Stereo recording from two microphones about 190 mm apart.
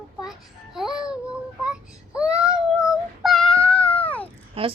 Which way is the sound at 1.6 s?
5° right (ahead or behind).